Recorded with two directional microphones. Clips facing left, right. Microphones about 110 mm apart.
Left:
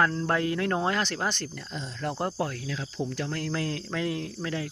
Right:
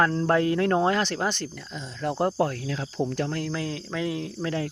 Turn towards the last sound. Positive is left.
turn(degrees=-25)  # may be behind; listen again after turning